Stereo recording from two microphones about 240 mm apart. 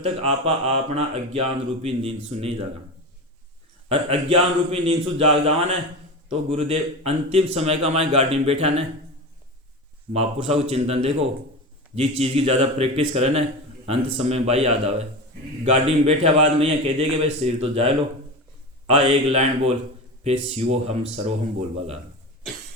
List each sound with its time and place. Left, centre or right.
0.0 s speech: right
3.8 s speech: right
10.1 s speech: right
18.9 s speech: right